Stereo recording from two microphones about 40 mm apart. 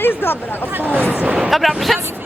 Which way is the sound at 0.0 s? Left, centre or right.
Left.